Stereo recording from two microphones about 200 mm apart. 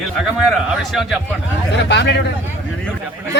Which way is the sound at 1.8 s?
60° left (ahead or behind).